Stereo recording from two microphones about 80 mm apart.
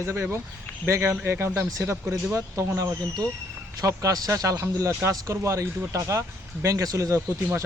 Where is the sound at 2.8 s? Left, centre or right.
Right.